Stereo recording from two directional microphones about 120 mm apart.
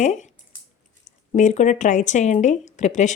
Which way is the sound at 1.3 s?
80° left.